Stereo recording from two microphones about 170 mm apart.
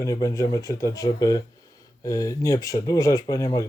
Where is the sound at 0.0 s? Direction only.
20° left (ahead or behind).